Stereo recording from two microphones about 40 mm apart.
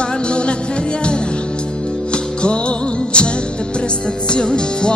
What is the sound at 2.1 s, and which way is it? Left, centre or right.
Music, left.